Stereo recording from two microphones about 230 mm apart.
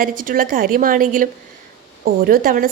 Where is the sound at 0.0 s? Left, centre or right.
Right.